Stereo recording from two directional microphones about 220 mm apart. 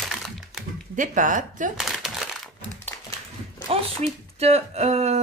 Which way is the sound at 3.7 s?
30° right (ahead or behind).